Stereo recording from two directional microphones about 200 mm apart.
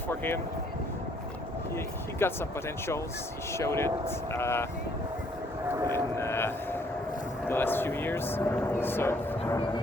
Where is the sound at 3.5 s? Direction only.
15° left (ahead or behind).